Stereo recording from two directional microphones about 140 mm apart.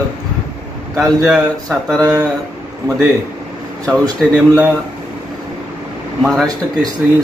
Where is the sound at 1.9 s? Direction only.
25° right (ahead or behind).